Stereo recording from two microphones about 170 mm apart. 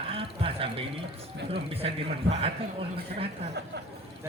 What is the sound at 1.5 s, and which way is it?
Speech, 35° right (ahead or behind).